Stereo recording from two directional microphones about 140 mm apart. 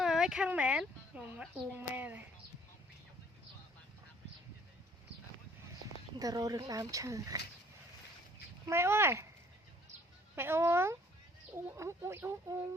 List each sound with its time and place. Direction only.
0.0 s speech: 5° right (ahead or behind)
6.1 s speech: 25° right (ahead or behind)
8.6 s speech: 20° right (ahead or behind)
10.3 s speech: 15° right (ahead or behind)